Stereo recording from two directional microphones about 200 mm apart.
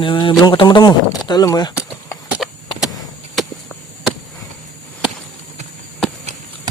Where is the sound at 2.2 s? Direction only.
5° right (ahead or behind).